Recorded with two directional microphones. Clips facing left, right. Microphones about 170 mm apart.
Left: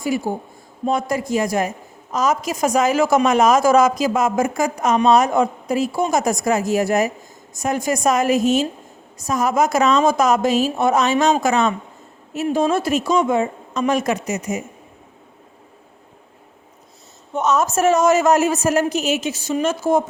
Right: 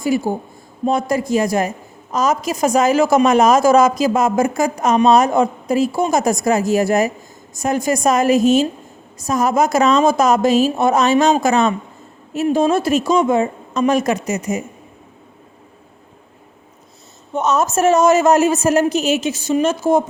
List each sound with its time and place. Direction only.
0.0 s a woman's voice: 35° right (ahead or behind)
17.3 s a woman's voice: 30° right (ahead or behind)